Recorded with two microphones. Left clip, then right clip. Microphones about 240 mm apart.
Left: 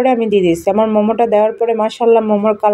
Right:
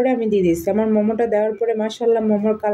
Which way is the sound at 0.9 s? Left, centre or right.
Centre.